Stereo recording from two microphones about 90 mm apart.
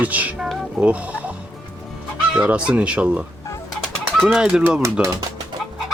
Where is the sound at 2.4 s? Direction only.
15° right (ahead or behind).